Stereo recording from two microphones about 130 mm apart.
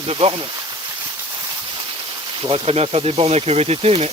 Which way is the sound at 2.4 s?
45° right (ahead or behind).